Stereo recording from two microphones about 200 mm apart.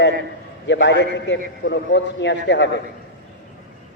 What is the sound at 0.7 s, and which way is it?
A man's voice, 65° left (ahead or behind).